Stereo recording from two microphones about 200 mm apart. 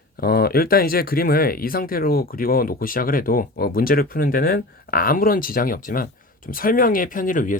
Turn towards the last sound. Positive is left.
turn(degrees=40)  # may be behind; listen again after turning